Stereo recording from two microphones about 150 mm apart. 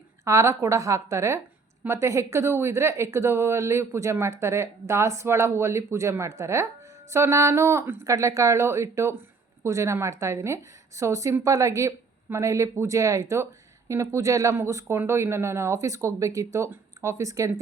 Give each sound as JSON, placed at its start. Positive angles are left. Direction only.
{"t": 0.3, "sound": "a woman's voice", "side_deg": -20}